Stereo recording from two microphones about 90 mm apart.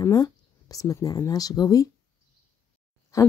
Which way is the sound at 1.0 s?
45° left (ahead or behind).